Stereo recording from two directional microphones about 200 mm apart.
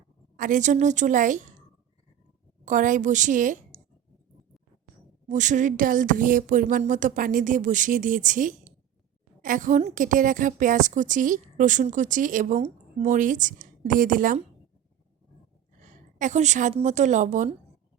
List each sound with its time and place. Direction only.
0.3 s a woman's voice: 40° right (ahead or behind)
2.6 s a woman's voice: 40° right (ahead or behind)
5.3 s a woman's voice: 40° right (ahead or behind)
15.8 s a woman's voice: 40° right (ahead or behind)